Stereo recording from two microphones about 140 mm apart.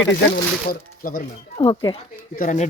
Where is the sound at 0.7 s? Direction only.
90° left.